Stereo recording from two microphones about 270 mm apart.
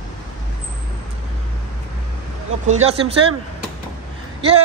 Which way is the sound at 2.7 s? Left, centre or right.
Right.